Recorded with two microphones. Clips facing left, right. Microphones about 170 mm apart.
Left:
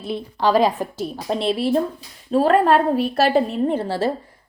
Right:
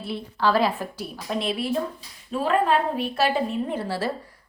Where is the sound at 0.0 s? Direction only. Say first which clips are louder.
Left 4 dB; 20° left (ahead or behind).